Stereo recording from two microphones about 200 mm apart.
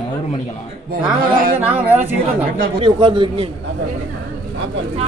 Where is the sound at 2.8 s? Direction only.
25° right (ahead or behind).